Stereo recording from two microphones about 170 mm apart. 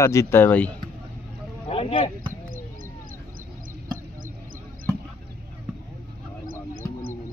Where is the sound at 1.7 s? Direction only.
35° left (ahead or behind).